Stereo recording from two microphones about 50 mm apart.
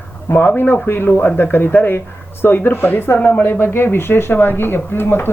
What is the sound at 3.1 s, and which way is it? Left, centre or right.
Speech, left.